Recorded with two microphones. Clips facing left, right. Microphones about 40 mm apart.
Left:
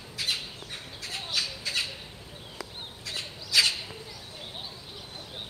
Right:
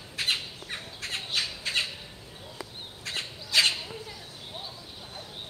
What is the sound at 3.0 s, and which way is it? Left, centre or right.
Crow, right.